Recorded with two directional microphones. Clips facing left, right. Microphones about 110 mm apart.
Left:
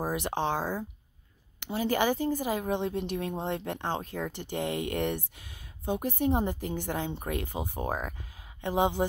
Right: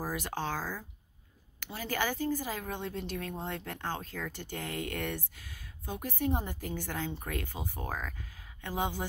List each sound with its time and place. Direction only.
0.0 s a woman's voice: 20° left (ahead or behind)